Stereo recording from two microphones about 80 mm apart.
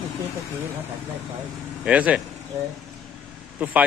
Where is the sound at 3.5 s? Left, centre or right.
Centre.